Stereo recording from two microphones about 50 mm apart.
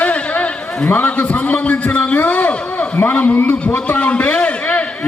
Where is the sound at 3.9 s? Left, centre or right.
Left.